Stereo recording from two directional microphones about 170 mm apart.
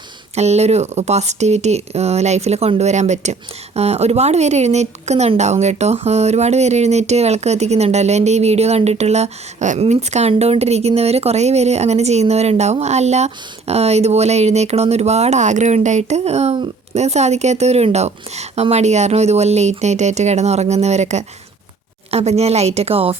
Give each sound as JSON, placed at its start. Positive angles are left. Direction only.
{"t": 0.3, "sound": "speech", "side_deg": -40}